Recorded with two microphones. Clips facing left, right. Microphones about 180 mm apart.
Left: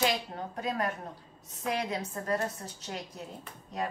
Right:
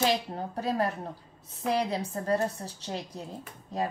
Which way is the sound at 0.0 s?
30° right (ahead or behind).